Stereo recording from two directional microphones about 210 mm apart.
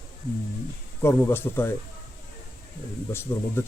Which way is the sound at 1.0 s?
10° left (ahead or behind).